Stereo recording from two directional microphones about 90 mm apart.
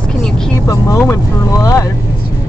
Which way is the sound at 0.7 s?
35° left (ahead or behind).